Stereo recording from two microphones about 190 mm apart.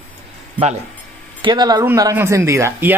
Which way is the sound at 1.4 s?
20° right (ahead or behind).